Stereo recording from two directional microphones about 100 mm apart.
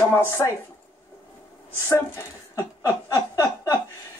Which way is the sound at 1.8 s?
30° left (ahead or behind).